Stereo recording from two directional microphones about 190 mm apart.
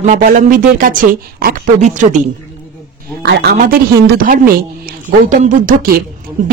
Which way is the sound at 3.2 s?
65° right (ahead or behind).